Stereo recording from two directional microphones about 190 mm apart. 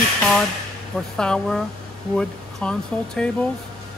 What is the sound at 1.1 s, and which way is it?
Speech, 5° left (ahead or behind).